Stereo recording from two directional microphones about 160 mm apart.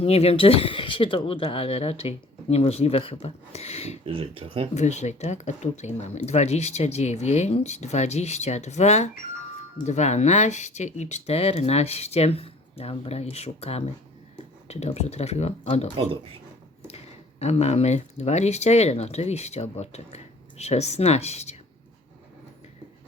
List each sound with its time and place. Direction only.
0.0 s speech: 40° left (ahead or behind)
4.0 s speech: 35° right (ahead or behind)
4.7 s speech: 45° left (ahead or behind)
17.4 s speech: 40° left (ahead or behind)